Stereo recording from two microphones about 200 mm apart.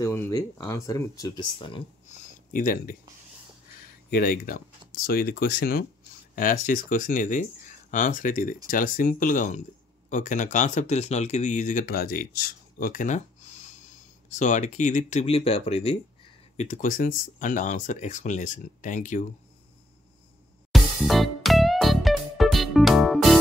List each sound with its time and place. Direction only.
0.0 s speech: 10° left (ahead or behind)
2.5 s speech: 45° left (ahead or behind)
4.1 s speech: 45° left (ahead or behind)
14.3 s speech: 40° left (ahead or behind)
20.7 s music: centre (ahead or behind)